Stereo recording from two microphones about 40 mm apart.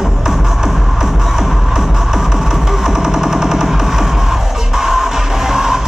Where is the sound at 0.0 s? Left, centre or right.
Centre.